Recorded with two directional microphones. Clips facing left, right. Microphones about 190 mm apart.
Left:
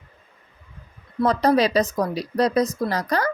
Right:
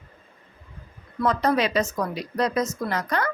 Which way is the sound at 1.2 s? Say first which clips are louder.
Left 4 dB; 35° left (ahead or behind).